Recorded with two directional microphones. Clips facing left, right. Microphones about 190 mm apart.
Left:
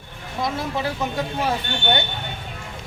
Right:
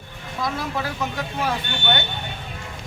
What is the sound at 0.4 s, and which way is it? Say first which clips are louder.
Speech: left 2 dB; 25° left (ahead or behind).